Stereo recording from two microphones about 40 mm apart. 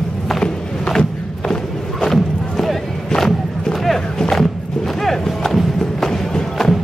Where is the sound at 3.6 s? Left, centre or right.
Centre.